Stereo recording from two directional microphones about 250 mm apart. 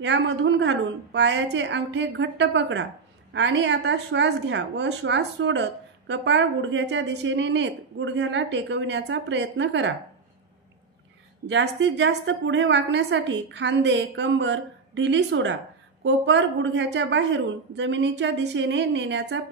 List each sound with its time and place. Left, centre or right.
0.0 s a woman's voice: right
11.4 s a woman's voice: right